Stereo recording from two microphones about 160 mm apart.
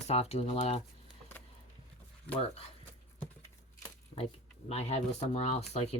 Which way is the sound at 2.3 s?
40° left (ahead or behind).